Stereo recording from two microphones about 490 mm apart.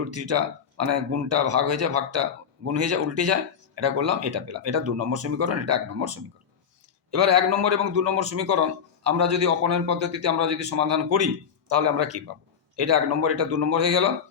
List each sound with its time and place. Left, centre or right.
0.0 s a man's voice: right